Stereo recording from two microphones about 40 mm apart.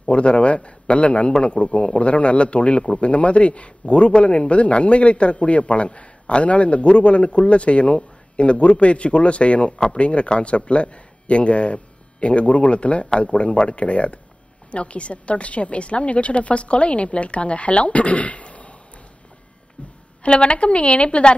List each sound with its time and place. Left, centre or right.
0.1 s a man's voice: left
20.2 s a man's voice: left